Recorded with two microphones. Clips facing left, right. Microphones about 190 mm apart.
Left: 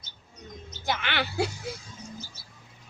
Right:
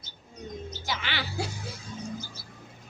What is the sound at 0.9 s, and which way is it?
Music, 60° left (ahead or behind).